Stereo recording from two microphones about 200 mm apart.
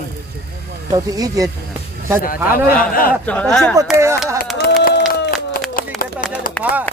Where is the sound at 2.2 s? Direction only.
45° left (ahead or behind).